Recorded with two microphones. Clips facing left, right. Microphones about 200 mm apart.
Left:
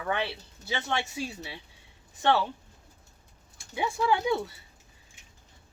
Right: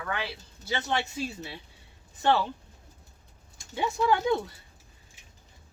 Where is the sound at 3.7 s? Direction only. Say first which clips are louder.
Right 1 dB; 10° left (ahead or behind).